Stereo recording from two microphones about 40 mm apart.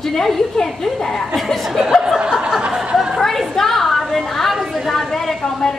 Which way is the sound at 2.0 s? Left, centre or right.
Centre.